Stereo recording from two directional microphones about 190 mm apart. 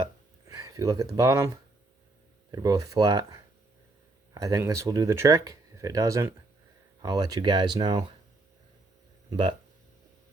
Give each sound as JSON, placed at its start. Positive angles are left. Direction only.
{"t": 0.4, "sound": "speech", "side_deg": -20}
{"t": 2.5, "sound": "speech", "side_deg": -20}
{"t": 9.3, "sound": "speech", "side_deg": -25}